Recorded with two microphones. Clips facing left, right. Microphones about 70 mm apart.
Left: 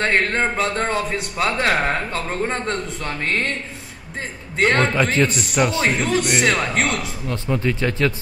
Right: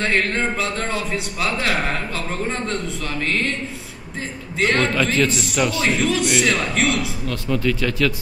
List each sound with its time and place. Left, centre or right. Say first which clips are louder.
0.0 s a man's voice: left 1 dB; left
2.5 s a man's voice: left 1 dB; left
4.6 s a man's voice: left 2 dB; left
4.9 s a man's voice: left 1 dB; left
5.9 s a man's voice: even; left
7.2 s a man's voice: left 1 dB; left